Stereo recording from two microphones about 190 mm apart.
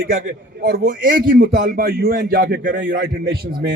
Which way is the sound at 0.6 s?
60° right (ahead or behind).